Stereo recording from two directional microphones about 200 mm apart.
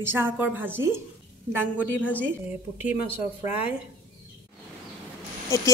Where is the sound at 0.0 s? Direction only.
10° right (ahead or behind).